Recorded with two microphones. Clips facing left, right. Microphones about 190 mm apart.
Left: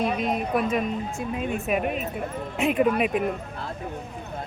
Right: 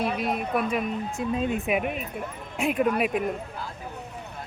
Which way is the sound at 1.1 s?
15° right (ahead or behind).